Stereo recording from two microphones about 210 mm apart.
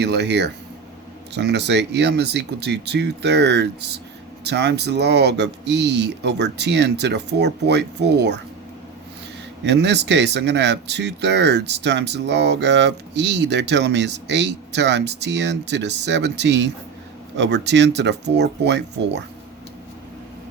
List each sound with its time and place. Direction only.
0.0 s speech: 55° right (ahead or behind)
9.6 s speech: 55° right (ahead or behind)